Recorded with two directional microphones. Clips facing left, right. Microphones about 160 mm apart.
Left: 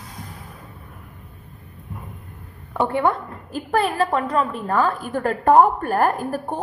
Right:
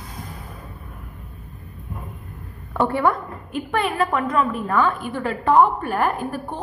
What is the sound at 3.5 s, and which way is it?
A woman's voice, 35° left (ahead or behind).